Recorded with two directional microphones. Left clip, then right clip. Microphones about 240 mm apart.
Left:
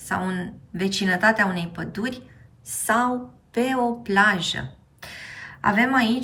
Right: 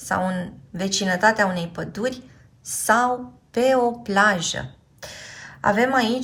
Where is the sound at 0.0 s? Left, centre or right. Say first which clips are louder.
Right 3 dB; centre.